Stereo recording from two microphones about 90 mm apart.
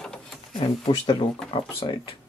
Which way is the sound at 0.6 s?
75° left (ahead or behind).